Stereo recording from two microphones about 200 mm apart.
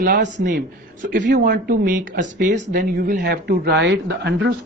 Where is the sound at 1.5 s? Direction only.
45° right (ahead or behind).